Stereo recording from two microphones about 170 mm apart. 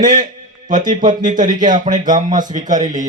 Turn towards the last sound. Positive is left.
turn(degrees=-45)  # may be behind; listen again after turning